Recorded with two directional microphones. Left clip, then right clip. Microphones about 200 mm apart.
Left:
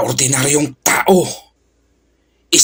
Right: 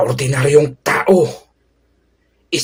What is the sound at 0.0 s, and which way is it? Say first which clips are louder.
Speech: even; 35° left (ahead or behind).